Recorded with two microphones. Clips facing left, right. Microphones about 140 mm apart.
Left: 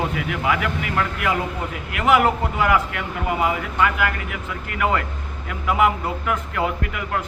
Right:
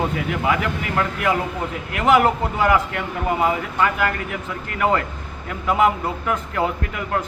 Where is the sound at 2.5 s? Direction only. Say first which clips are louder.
Right 1 dB; 30° right (ahead or behind).